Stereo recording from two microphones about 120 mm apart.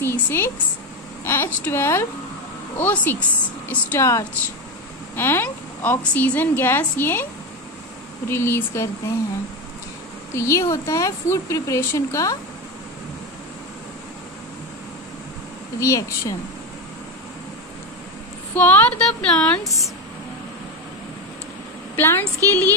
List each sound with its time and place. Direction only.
0.0 s a woman's voice: 20° left (ahead or behind)
8.3 s a woman's voice: 20° left (ahead or behind)
10.3 s a woman's voice: 25° left (ahead or behind)
15.8 s a woman's voice: 25° left (ahead or behind)
18.5 s a woman's voice: 15° left (ahead or behind)
21.9 s a woman's voice: 15° left (ahead or behind)